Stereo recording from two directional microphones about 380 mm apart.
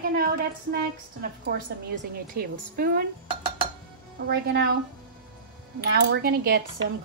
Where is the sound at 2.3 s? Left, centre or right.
Right.